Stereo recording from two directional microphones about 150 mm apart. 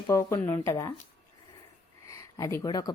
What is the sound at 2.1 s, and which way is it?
Speech, 20° left (ahead or behind).